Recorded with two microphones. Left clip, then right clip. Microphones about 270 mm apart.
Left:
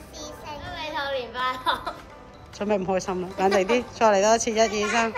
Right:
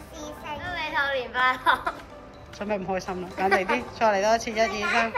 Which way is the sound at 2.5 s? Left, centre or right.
Centre.